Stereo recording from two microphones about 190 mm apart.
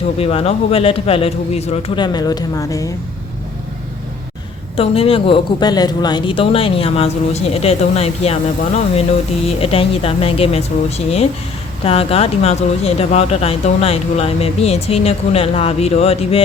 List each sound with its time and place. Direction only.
0.2 s speech: 30° left (ahead or behind)
4.8 s speech: 30° left (ahead or behind)
9.5 s speech: 30° left (ahead or behind)